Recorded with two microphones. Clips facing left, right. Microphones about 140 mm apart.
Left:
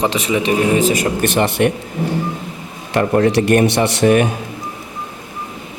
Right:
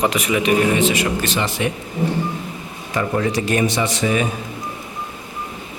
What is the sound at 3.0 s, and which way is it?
A man's voice, 65° left (ahead or behind).